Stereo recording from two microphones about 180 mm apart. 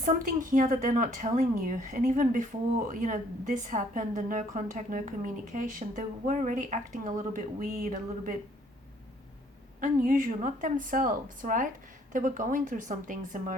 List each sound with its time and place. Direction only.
0.0 s a woman's voice: 45° right (ahead or behind)
9.8 s a woman's voice: 50° right (ahead or behind)